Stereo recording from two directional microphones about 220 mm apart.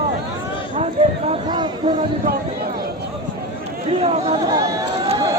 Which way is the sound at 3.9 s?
30° right (ahead or behind).